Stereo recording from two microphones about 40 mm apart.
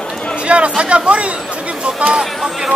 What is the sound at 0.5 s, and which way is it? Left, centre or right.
Chatter, right.